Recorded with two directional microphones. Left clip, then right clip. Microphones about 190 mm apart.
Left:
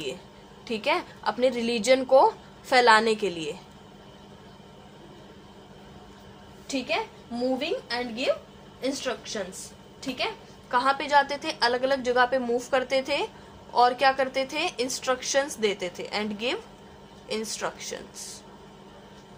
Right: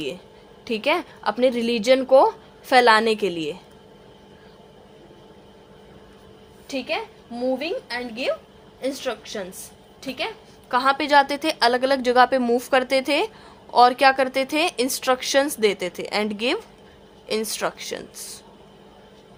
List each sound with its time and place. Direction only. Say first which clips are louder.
0.6 s a woman's voice: right 4 dB; 35° right (ahead or behind)
6.7 s a woman's voice: right 1 dB; 35° right (ahead or behind)
10.7 s a woman's voice: right 4 dB; 50° right (ahead or behind)